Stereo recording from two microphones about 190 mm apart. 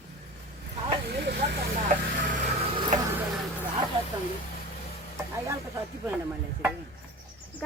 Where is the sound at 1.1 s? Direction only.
60° right (ahead or behind).